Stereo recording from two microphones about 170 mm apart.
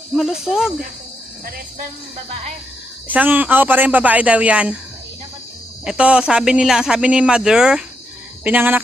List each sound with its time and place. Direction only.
0.2 s speech: centre (ahead or behind)
3.1 s speech: 10° right (ahead or behind)
5.8 s speech: 5° right (ahead or behind)